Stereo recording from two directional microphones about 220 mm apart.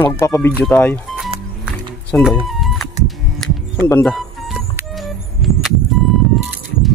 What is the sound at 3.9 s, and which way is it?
Music, 5° left (ahead or behind).